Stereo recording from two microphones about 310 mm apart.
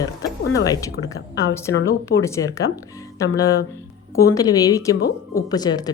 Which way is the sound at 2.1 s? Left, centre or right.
Left.